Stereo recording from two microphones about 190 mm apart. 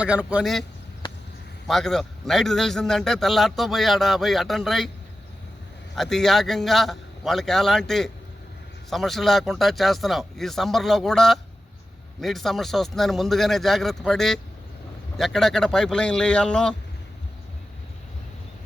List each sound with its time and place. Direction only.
0.0 s a man's voice: 10° right (ahead or behind)
1.6 s a man's voice: centre (ahead or behind)
6.0 s a man's voice: centre (ahead or behind)